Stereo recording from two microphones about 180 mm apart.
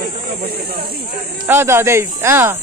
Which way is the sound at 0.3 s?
60° right (ahead or behind).